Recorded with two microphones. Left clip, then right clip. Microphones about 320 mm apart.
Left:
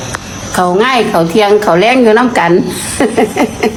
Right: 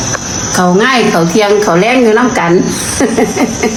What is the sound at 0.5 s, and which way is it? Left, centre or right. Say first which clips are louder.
A woman's voice: even; left.